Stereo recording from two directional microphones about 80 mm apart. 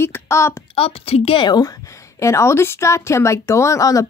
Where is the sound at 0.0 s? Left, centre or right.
Left.